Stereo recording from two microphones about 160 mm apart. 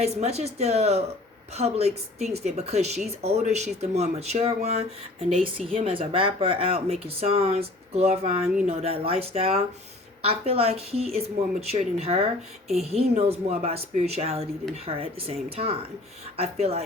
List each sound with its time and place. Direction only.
0.0 s speech: 40° right (ahead or behind)